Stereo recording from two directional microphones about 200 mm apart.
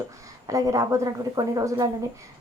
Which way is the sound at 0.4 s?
15° right (ahead or behind).